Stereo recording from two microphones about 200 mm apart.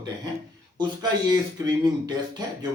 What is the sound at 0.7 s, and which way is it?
Speech, 20° right (ahead or behind).